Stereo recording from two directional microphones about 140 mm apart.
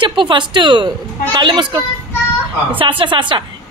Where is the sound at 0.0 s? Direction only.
35° right (ahead or behind).